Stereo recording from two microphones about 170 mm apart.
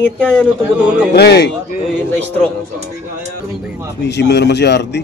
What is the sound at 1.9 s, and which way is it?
Speech, 10° left (ahead or behind).